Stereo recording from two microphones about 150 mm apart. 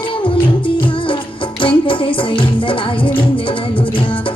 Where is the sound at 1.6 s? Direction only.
35° left (ahead or behind).